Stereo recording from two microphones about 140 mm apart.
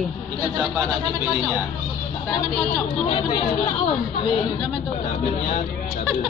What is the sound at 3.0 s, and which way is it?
Speech, 35° left (ahead or behind).